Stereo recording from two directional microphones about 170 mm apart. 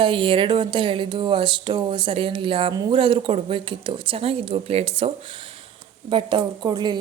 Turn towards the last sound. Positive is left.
turn(degrees=-25)  # may be behind; listen again after turning